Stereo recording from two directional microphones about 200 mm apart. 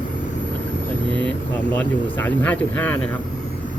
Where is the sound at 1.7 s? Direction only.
10° left (ahead or behind).